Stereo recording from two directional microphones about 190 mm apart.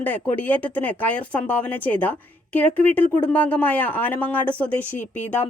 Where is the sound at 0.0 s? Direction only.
10° left (ahead or behind).